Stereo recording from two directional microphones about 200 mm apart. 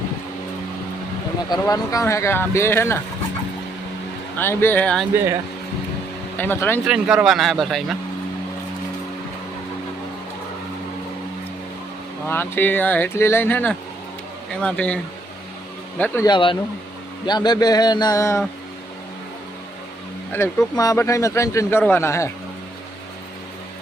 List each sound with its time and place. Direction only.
1.5 s speech: 20° left (ahead or behind)
4.4 s speech: 10° left (ahead or behind)
5.1 s speech: 10° right (ahead or behind)
6.3 s speech: 10° left (ahead or behind)
6.8 s speech: 5° right (ahead or behind)
12.3 s speech: 10° left (ahead or behind)
16.2 s a man's voice: 25° left (ahead or behind)
20.3 s speech: 15° left (ahead or behind)